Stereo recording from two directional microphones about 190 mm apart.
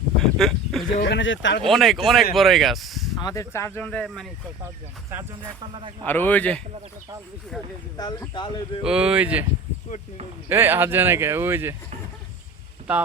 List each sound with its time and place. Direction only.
0.2 s a sound: centre (ahead or behind)
0.9 s speech: 60° left (ahead or behind)
1.7 s speech: centre (ahead or behind)
3.2 s speech: 20° left (ahead or behind); by 4.3 s 5° left (ahead or behind)
5.7 s speech: 25° right (ahead or behind)
6.1 s speech: 10° left (ahead or behind)
7.9 s speech: 20° left (ahead or behind)
8.8 s speech: 5° right (ahead or behind)
10.5 s speech: 10° right (ahead or behind)